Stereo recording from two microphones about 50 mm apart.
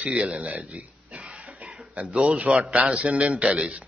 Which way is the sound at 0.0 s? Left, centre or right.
Right.